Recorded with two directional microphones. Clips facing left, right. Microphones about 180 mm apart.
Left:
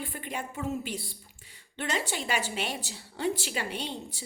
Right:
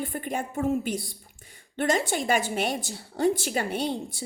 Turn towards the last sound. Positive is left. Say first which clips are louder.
# right 7 dB
turn(degrees=-45)  # may be behind; listen again after turning